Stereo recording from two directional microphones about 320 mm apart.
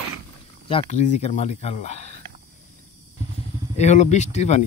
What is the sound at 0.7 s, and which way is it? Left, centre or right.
Speech, centre.